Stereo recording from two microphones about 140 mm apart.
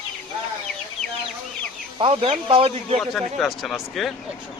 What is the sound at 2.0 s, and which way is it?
Speech, 45° right (ahead or behind).